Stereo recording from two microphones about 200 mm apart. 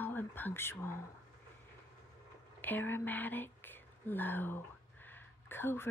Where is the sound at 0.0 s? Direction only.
10° left (ahead or behind).